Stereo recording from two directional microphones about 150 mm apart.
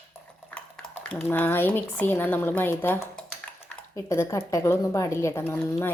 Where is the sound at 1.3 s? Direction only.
15° left (ahead or behind).